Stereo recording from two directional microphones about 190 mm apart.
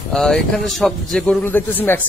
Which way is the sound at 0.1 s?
5° left (ahead or behind).